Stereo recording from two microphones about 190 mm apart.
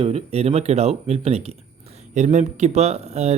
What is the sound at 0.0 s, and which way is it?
Speech, 30° right (ahead or behind).